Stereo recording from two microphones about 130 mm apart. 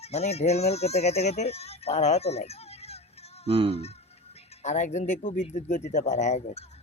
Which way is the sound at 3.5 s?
45° right (ahead or behind).